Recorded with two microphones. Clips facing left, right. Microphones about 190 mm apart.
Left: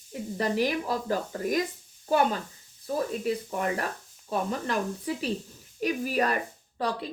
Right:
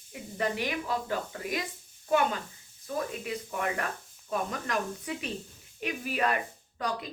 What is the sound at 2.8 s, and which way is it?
A woman's voice, 35° left (ahead or behind).